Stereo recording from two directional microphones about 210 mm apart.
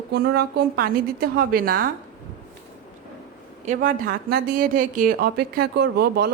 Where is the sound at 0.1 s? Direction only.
50° right (ahead or behind).